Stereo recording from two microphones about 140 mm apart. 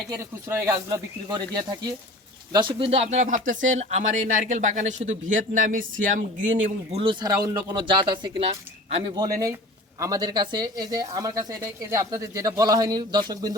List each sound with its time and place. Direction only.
0.2 s speech: 20° right (ahead or behind)
1.3 s speech: 30° right (ahead or behind); by 6.7 s 65° right (ahead or behind)
6.9 s speech: 35° right (ahead or behind)
8.4 s speech: 45° right (ahead or behind)
9.1 s speech: 25° right (ahead or behind)